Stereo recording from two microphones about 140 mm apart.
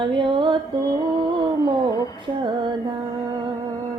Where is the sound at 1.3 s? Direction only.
35° right (ahead or behind).